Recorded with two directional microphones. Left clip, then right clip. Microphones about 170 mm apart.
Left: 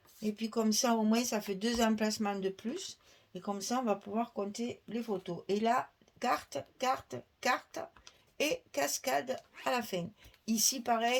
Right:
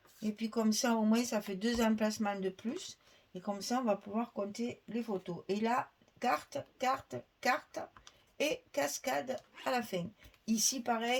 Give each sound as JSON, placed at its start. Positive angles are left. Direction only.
{"t": 0.2, "sound": "speech", "side_deg": 40}